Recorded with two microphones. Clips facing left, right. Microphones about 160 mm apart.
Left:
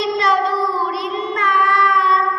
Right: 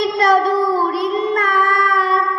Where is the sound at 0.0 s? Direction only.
45° right (ahead or behind).